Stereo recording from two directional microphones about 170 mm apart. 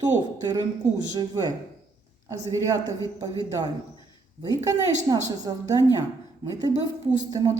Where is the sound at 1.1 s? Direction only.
20° right (ahead or behind).